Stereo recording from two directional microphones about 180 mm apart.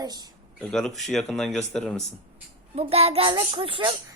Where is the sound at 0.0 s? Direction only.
20° right (ahead or behind).